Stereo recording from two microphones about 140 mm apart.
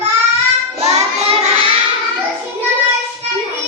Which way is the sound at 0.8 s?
45° right (ahead or behind).